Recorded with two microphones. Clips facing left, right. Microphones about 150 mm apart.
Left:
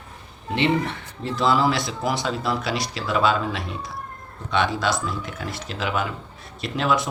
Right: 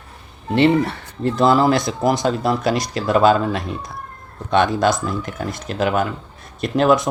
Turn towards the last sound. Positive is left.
turn(degrees=-45)  # may be behind; listen again after turning